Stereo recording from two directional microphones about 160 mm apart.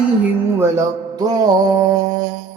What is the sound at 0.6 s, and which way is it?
Music, 20° right (ahead or behind).